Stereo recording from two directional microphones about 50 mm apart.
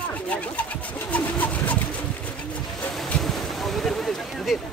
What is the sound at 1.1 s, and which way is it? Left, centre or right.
Pigeon, left.